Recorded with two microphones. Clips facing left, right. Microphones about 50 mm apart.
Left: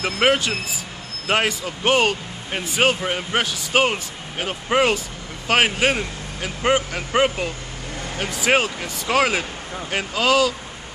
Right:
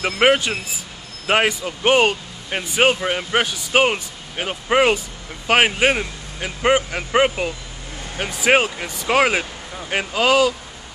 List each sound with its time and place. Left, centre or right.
0.0 s speech: centre